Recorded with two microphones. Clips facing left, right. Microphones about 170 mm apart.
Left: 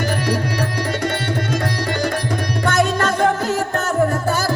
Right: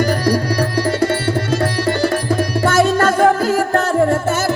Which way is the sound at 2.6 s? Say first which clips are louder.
Right 4 dB; 30° right (ahead or behind).